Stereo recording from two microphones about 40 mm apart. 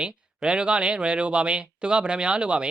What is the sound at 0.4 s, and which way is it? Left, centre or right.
Speech, right.